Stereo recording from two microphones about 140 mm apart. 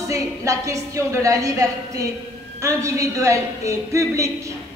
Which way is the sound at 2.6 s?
20° right (ahead or behind).